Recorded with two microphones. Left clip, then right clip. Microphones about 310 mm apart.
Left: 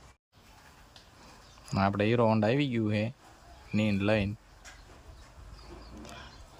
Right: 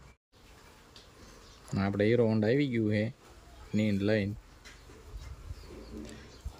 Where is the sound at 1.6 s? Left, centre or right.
Centre.